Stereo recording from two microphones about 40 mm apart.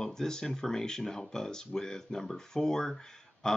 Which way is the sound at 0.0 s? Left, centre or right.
Centre.